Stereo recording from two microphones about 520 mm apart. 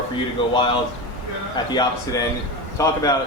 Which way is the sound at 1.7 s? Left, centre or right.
Centre.